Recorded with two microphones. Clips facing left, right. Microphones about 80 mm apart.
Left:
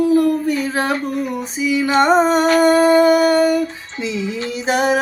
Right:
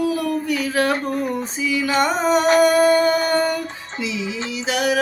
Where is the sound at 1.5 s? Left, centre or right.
Centre; by 2.5 s left.